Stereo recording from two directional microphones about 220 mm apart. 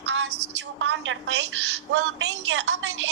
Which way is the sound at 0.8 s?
60° right (ahead or behind).